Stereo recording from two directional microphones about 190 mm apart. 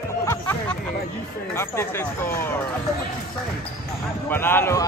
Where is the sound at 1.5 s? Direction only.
15° left (ahead or behind).